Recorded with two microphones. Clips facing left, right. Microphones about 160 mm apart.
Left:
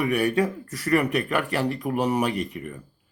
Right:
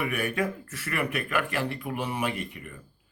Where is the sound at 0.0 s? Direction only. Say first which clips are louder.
Left 6 dB; 35° left (ahead or behind).